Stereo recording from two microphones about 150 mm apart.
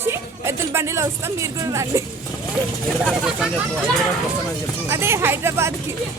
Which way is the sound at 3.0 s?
Centre (ahead or behind).